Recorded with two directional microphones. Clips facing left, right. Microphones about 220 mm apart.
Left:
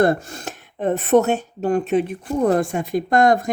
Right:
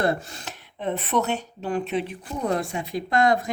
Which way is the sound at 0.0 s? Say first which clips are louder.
Left 7 dB; 50° left (ahead or behind).